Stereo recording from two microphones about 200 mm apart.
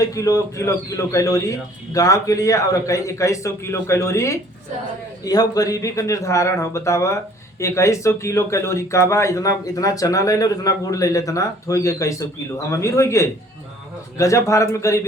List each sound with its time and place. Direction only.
0.0 s speech: 15° left (ahead or behind)